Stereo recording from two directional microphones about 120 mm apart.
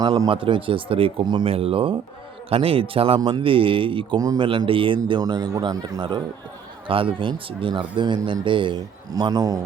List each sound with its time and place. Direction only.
0.0 s speech: 30° right (ahead or behind)
0.3 s speech: 45° right (ahead or behind)
1.5 s speech: 50° right (ahead or behind)
3.2 s speech: 35° right (ahead or behind)
3.4 s speech: 50° right (ahead or behind); by 9.6 s 30° right (ahead or behind)